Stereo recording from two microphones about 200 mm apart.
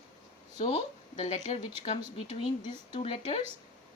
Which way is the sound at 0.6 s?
30° left (ahead or behind).